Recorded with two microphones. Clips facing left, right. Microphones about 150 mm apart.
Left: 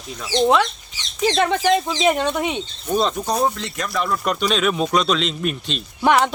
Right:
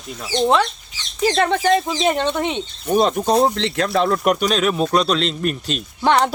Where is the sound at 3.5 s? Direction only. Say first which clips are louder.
Right 7 dB; 80° right.